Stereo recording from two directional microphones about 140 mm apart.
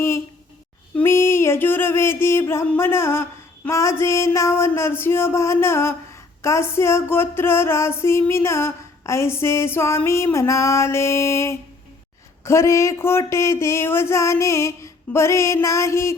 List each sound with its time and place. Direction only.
0.9 s music: 20° left (ahead or behind)